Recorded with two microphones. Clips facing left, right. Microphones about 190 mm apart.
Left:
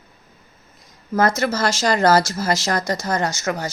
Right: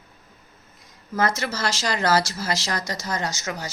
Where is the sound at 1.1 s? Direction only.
45° left (ahead or behind).